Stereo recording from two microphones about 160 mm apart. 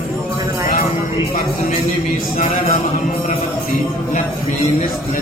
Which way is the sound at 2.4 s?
60° left (ahead or behind).